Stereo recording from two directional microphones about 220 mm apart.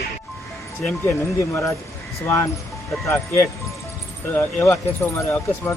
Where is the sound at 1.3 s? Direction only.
15° left (ahead or behind).